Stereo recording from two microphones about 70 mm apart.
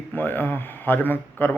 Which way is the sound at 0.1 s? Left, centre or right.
Left.